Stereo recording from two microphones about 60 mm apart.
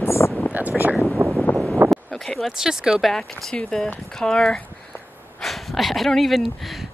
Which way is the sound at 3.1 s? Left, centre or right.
Centre.